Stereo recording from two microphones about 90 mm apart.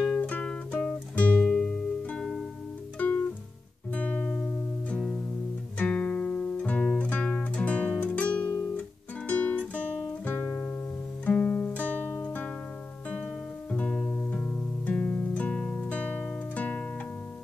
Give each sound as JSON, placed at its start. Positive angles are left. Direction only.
{"t": 0.0, "sound": "music", "side_deg": 15}
{"t": 3.9, "sound": "music", "side_deg": 15}
{"t": 8.0, "sound": "guitar", "side_deg": 15}
{"t": 9.3, "sound": "music", "side_deg": 15}
{"t": 10.2, "sound": "guitar", "side_deg": 15}
{"t": 11.2, "sound": "music", "side_deg": 15}